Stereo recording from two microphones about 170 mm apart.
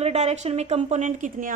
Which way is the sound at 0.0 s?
40° right (ahead or behind).